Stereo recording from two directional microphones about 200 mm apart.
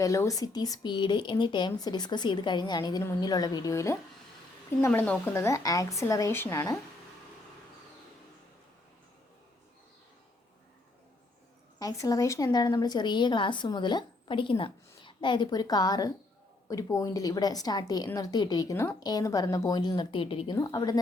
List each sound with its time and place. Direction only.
0.0 s a woman's voice: 15° left (ahead or behind)
11.8 s a woman's voice: 15° left (ahead or behind)